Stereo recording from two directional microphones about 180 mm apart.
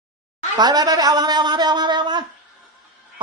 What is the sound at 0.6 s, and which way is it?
A man's voice, 20° right (ahead or behind).